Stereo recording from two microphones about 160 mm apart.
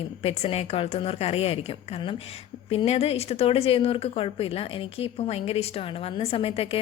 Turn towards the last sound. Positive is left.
turn(degrees=35)  # may be behind; listen again after turning